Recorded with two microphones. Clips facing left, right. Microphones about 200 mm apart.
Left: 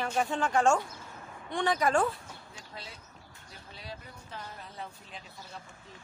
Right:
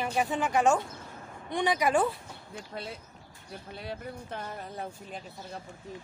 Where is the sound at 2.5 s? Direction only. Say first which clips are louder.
Right 11 dB; 55° right (ahead or behind).